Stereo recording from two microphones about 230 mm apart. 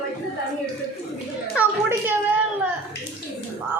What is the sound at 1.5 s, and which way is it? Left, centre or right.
Children playing, centre.